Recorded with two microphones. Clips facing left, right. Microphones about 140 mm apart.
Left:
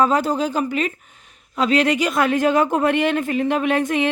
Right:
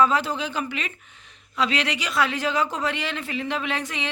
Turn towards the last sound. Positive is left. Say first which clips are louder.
# left 10 dB
turn(degrees=50)  # may be behind; listen again after turning